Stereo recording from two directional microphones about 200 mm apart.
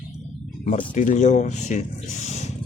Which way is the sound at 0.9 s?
35° left (ahead or behind).